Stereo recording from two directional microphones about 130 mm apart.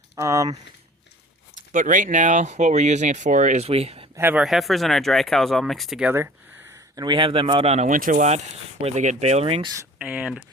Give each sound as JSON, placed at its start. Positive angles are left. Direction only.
{"t": 0.2, "sound": "speech", "side_deg": -25}
{"t": 1.7, "sound": "speech", "side_deg": -90}
{"t": 3.7, "sound": "speech", "side_deg": -50}
{"t": 4.1, "sound": "speech", "side_deg": -15}
{"t": 4.4, "sound": "speech", "side_deg": 0}
{"t": 6.1, "sound": "speech", "side_deg": -15}
{"t": 10.0, "sound": "speech", "side_deg": -10}